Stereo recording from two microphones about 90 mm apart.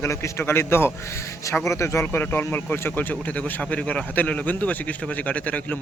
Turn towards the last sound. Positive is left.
turn(degrees=15)  # may be behind; listen again after turning